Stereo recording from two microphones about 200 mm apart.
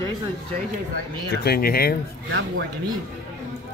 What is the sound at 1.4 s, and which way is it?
Speech, 50° left (ahead or behind).